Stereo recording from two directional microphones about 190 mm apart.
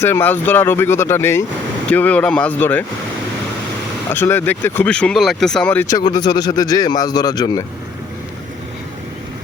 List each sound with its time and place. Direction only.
0.0 s speech: 10° left (ahead or behind)
4.1 s speech: 10° left (ahead or behind)